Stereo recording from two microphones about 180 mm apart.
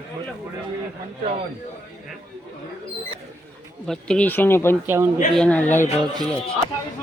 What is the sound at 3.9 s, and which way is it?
Speech, 5° left (ahead or behind).